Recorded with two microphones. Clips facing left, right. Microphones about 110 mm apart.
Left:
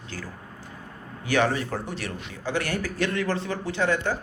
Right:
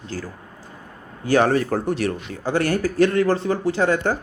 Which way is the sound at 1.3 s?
40° right (ahead or behind).